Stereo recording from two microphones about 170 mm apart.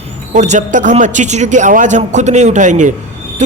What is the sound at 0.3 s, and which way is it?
Speech, 45° right (ahead or behind).